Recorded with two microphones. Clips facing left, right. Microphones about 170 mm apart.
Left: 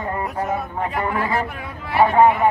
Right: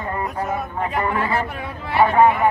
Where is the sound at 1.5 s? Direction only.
30° right (ahead or behind).